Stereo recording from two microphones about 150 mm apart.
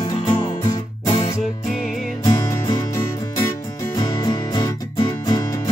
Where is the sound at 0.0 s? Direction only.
30° left (ahead or behind).